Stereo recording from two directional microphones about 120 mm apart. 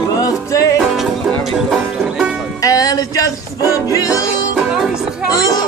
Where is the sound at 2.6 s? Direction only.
30° left (ahead or behind).